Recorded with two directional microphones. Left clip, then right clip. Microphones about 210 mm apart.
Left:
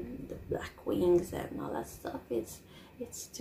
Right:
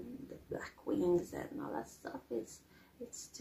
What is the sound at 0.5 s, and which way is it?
Speech, centre (ahead or behind).